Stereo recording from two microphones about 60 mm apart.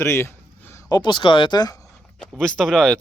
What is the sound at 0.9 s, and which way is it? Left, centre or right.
Speech, left.